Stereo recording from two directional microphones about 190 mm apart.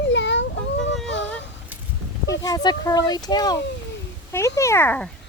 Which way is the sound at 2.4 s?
20° left (ahead or behind).